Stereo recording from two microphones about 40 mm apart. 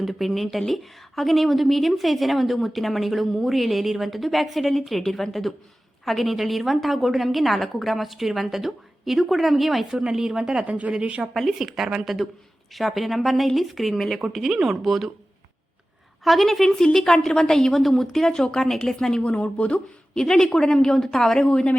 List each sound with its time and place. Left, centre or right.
0.0 s a woman's voice: centre
9.9 s speech: centre
10.7 s speech: right
11.3 s a woman's voice: centre
16.2 s a woman's voice: centre
18.3 s a woman's voice: centre
19.2 s speech: left
20.1 s a woman's voice: centre